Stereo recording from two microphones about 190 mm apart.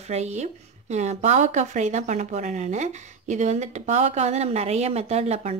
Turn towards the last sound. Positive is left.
turn(degrees=-35)  # may be behind; listen again after turning